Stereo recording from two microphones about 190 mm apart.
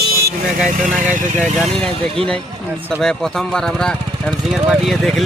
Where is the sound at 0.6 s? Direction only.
40° right (ahead or behind).